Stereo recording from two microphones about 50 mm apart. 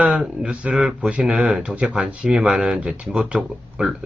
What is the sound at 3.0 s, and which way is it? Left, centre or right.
Speech, centre.